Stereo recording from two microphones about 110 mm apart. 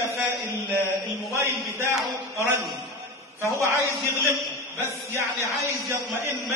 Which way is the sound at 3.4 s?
25° right (ahead or behind).